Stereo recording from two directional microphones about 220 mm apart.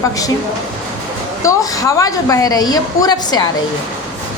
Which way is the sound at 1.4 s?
15° left (ahead or behind).